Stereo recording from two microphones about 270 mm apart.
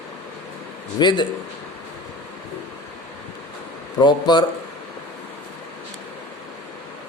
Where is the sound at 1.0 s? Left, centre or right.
Centre.